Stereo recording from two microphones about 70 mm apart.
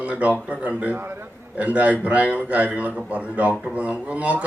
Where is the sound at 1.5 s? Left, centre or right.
Right.